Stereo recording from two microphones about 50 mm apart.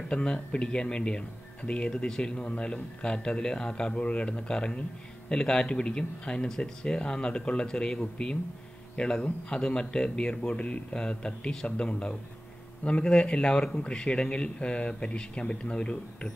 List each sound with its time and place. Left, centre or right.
0.1 s speech: centre